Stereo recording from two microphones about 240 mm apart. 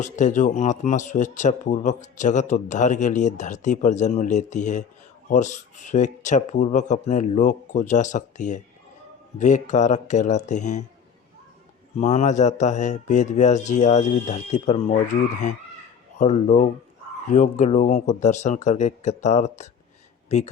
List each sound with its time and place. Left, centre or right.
0.0 s speech: left
11.9 s speech: left